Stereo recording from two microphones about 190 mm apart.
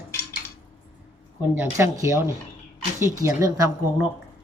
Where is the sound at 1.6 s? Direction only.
15° right (ahead or behind).